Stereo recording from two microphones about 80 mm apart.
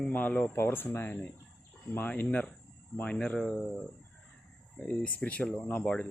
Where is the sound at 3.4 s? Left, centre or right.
Centre.